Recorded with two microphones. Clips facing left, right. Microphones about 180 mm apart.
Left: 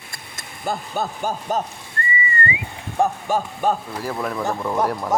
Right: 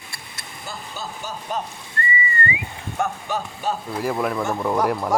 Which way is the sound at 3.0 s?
45° left (ahead or behind).